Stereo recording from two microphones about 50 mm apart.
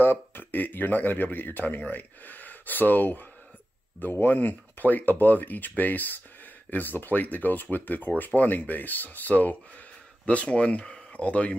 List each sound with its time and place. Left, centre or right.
0.0 s speech: left